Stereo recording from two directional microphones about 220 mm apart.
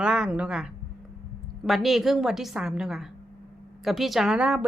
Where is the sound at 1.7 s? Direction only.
Centre (ahead or behind).